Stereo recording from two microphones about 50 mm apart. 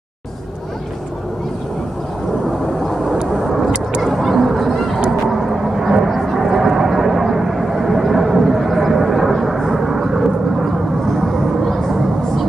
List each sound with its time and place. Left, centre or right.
3.4 s vehicle: centre
4.0 s a sound: centre
5.2 s vehicle: centre